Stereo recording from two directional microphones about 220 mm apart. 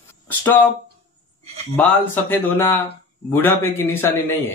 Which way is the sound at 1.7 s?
10° left (ahead or behind).